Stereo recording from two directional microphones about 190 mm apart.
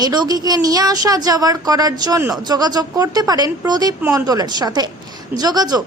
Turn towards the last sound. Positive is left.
turn(degrees=-20)  # may be behind; listen again after turning